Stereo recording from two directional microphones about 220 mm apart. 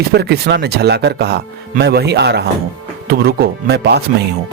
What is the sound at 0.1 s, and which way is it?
Speech, 50° right (ahead or behind).